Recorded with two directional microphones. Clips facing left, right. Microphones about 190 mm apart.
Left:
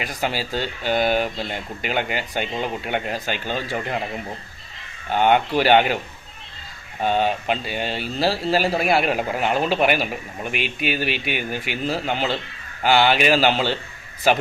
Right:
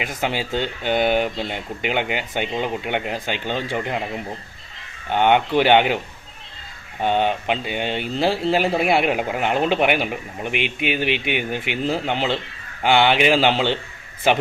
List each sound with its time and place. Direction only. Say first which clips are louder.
0.0 s speech: right 1 dB; 20° right (ahead or behind)
5.1 s speech: right 1 dB; 20° right (ahead or behind)
7.0 s speech: right 1 dB; 20° right (ahead or behind)